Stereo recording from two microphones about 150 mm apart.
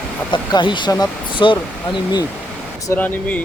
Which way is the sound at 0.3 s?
30° left (ahead or behind).